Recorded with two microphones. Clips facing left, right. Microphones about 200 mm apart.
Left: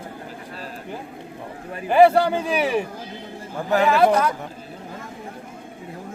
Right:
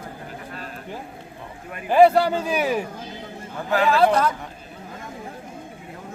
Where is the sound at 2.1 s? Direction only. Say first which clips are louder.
Left 1 dB; 10° left (ahead or behind).